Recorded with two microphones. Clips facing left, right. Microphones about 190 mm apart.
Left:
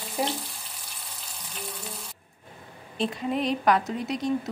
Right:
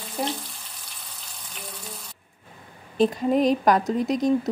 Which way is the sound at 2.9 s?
40° right (ahead or behind).